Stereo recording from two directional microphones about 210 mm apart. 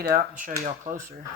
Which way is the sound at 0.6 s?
35° right (ahead or behind).